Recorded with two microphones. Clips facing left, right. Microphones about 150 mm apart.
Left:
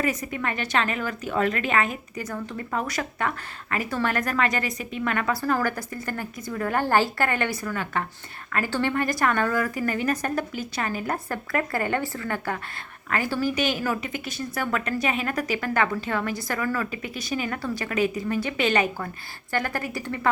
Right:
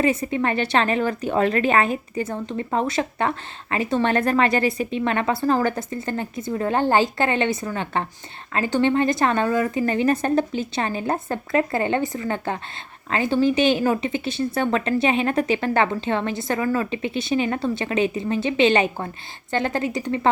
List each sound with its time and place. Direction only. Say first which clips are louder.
0.0 s a woman's voice: right 6 dB; 30° right (ahead or behind)